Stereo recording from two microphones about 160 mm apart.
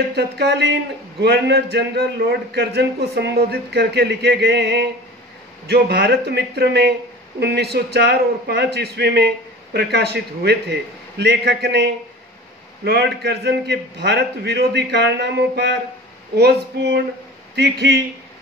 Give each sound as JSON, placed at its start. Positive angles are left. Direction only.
{"t": 0.1, "sound": "a man's voice", "side_deg": -90}